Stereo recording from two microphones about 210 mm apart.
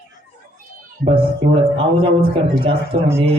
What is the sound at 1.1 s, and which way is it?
Speech, 25° right (ahead or behind).